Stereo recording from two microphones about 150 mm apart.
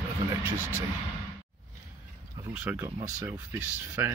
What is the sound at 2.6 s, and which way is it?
Speech, 15° right (ahead or behind).